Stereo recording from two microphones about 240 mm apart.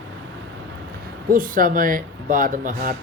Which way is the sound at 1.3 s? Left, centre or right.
Right.